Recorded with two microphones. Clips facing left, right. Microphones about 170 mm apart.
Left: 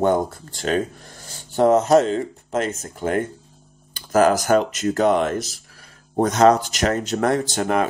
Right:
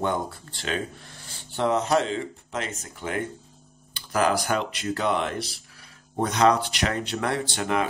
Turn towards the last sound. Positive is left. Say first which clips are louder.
# left 5 dB
turn(degrees=45)  # may be behind; listen again after turning